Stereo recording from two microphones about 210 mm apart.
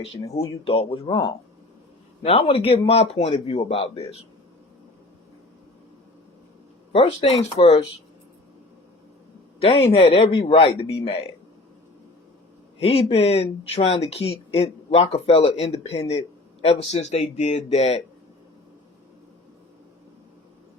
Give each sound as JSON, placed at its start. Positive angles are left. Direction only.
{"t": 0.0, "sound": "speech", "side_deg": 25}
{"t": 6.9, "sound": "speech", "side_deg": 25}
{"t": 9.6, "sound": "speech", "side_deg": 30}
{"t": 12.8, "sound": "speech", "side_deg": 25}